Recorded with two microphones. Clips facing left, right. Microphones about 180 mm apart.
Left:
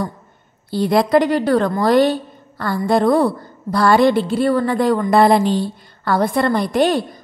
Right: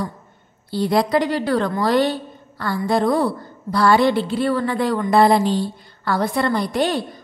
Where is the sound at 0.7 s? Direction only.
55° left (ahead or behind).